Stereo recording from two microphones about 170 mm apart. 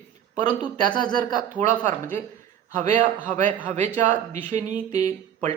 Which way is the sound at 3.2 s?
45° right (ahead or behind).